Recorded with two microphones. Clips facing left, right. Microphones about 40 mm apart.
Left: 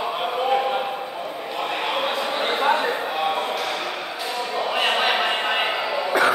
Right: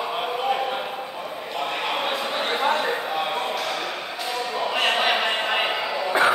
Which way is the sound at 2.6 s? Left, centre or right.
Centre.